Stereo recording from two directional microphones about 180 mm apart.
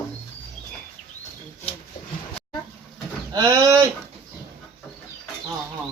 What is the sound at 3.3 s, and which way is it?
Speech, 15° right (ahead or behind).